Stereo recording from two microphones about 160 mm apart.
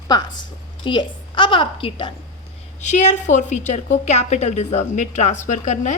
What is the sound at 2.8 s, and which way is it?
A woman's voice, 45° left (ahead or behind).